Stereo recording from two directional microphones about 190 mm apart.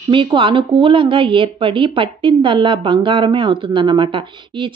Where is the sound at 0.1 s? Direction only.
25° right (ahead or behind).